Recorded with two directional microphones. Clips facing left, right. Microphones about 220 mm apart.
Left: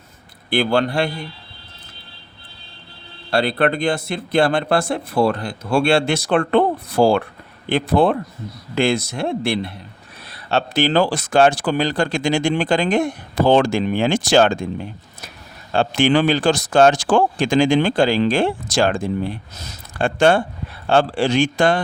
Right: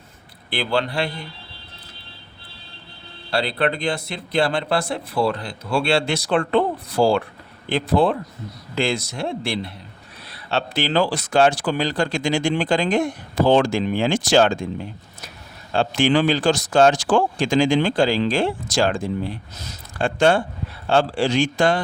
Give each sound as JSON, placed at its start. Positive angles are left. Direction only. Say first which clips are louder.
{"t": 0.5, "sound": "speech", "louder": "left 5 dB", "side_deg": 50}
{"t": 3.2, "sound": "speech", "louder": "left 4 dB", "side_deg": 50}
{"t": 15.7, "sound": "speech", "louder": "left 2 dB", "side_deg": 55}